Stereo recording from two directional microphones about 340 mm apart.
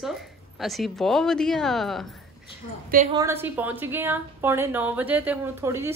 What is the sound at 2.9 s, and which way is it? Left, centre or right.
Speech, centre.